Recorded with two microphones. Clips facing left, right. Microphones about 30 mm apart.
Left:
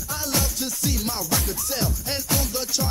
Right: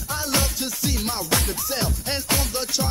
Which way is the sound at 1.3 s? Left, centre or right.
Right.